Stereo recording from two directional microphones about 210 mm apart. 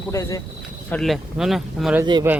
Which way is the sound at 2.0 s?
20° right (ahead or behind).